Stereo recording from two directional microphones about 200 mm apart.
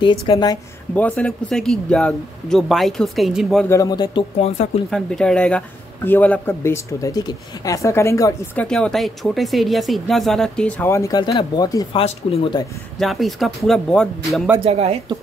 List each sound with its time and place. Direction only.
0.0 s speech: 20° left (ahead or behind)
0.9 s speech: 5° left (ahead or behind)
3.6 s speech: 15° left (ahead or behind)
4.9 s speech: 5° left (ahead or behind)
8.6 s speech: 5° left (ahead or behind); by 12.6 s 25° left (ahead or behind)
13.0 s speech: centre (ahead or behind)
14.6 s speech: 30° right (ahead or behind)